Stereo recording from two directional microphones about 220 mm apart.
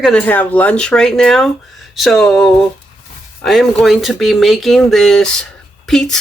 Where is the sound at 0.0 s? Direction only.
5° left (ahead or behind).